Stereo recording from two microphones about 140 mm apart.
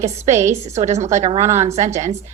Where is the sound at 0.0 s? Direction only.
55° right (ahead or behind).